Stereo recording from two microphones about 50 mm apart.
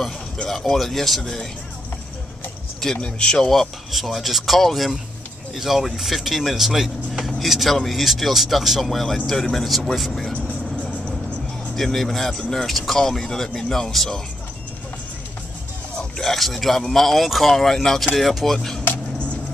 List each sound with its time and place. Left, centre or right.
0.5 s speech: centre
3.0 s speech: centre
3.4 s speech: centre
10.3 s vehicle: left
11.7 s speech: centre
16.2 s speech: centre